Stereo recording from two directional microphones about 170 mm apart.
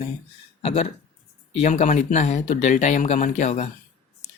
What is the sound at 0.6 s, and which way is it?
Speech, 40° left (ahead or behind).